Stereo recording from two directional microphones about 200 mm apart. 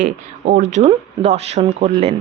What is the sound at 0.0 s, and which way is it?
Speech, 40° right (ahead or behind).